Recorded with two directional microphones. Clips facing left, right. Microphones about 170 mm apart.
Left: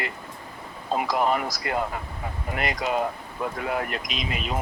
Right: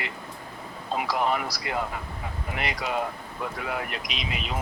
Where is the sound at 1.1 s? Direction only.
45° left (ahead or behind).